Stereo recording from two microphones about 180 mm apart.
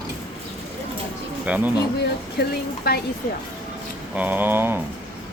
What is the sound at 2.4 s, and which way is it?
Speech, 65° left (ahead or behind).